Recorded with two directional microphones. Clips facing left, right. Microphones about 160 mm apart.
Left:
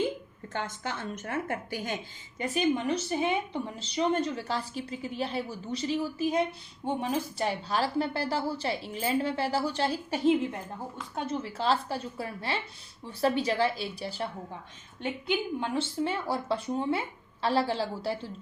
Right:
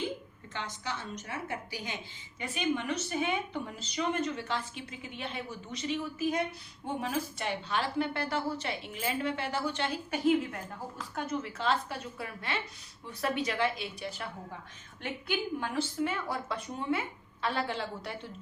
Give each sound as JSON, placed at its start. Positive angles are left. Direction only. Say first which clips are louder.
{"t": 0.5, "sound": "a woman's voice", "louder": "left 4 dB", "side_deg": 50}
{"t": 2.7, "sound": "a woman's voice", "louder": "left 4 dB", "side_deg": 35}
{"t": 15.6, "sound": "a woman's voice", "louder": "left 2 dB", "side_deg": 25}